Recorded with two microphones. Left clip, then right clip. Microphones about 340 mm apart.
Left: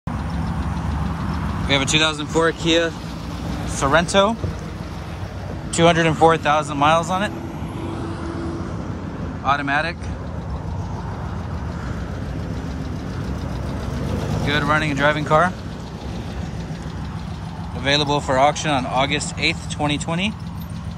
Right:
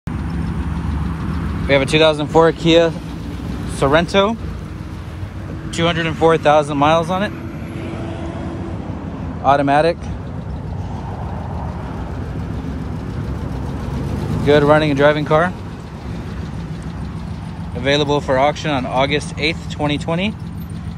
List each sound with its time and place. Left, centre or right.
1.7 s speech: centre
3.8 s speech: centre
5.8 s speech: centre
6.2 s speech: centre
9.4 s speech: centre
14.4 s speech: centre
18.0 s speech: centre